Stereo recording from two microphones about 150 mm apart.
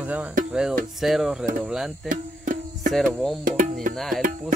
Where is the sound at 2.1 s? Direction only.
60° right (ahead or behind).